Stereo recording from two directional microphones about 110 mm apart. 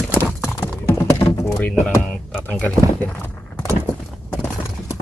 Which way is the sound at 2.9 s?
15° left (ahead or behind).